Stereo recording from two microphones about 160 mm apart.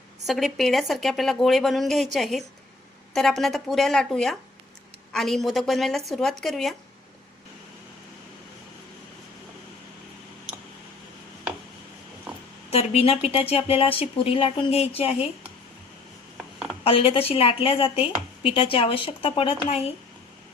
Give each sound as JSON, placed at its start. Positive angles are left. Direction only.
{"t": 0.3, "sound": "speech", "side_deg": 0}
{"t": 12.7, "sound": "a woman's voice", "side_deg": 40}
{"t": 16.8, "sound": "a woman's voice", "side_deg": 35}